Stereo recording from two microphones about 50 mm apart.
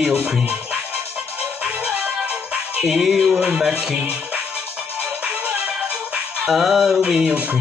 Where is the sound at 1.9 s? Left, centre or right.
Centre.